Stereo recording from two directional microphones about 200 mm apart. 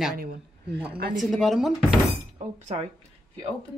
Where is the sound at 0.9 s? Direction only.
50° right (ahead or behind).